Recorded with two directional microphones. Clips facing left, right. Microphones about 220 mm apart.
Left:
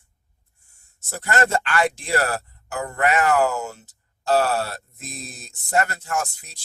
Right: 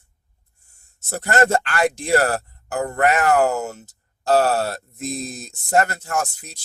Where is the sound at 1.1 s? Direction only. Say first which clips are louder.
Right 4 dB; 40° right (ahead or behind).